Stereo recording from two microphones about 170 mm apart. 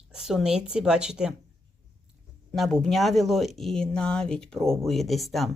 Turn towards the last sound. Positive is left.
turn(degrees=0)  # may be behind; listen again after turning